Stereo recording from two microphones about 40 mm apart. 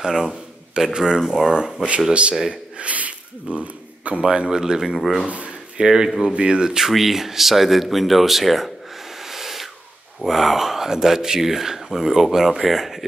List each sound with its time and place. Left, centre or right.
0.1 s speech: centre
2.8 s a sound: right
4.2 s speech: right
4.9 s speech: centre
5.2 s speech: right
5.8 s speech: centre
6.9 s speech: centre
9.2 s owl: centre
10.2 s speech: centre